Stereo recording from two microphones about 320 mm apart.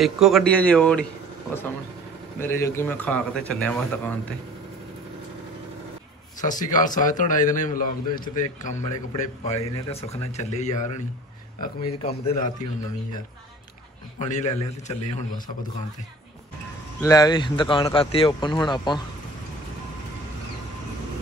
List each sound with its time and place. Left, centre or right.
0.0 s a man's voice: centre
2.4 s a man's voice: centre
6.4 s a man's voice: left
14.2 s a man's voice: left
17.0 s speech: centre